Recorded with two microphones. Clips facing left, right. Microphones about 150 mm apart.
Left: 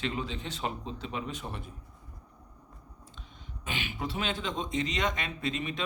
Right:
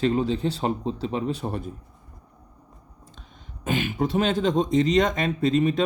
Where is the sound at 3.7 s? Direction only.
45° right (ahead or behind).